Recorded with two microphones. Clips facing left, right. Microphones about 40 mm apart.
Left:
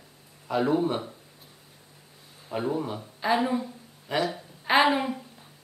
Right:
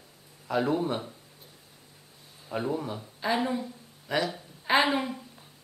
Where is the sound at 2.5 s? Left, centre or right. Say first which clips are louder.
Left 2 dB; centre.